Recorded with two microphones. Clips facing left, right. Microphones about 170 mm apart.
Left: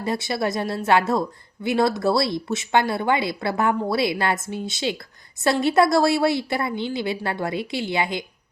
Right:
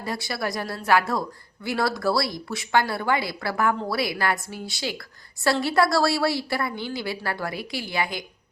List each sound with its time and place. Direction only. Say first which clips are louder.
0.0 s speech: left 5 dB; 20° left (ahead or behind)